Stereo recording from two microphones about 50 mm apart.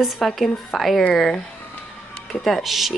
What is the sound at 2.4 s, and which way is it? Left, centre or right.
Speech, centre.